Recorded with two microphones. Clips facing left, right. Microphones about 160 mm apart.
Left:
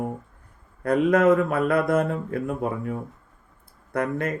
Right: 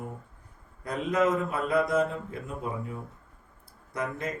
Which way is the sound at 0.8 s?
60° left (ahead or behind).